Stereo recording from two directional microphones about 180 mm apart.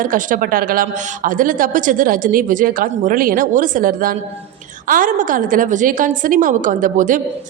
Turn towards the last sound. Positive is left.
turn(degrees=-45)  # may be behind; listen again after turning